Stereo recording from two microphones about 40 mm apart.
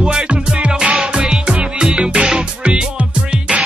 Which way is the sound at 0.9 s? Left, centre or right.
Centre.